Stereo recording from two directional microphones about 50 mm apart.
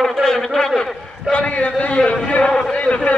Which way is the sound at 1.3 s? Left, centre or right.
Left.